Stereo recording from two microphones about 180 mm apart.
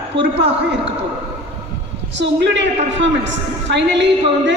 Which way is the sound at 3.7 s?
75° right (ahead or behind).